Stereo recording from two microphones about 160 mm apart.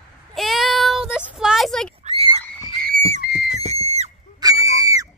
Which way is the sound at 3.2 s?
90° left.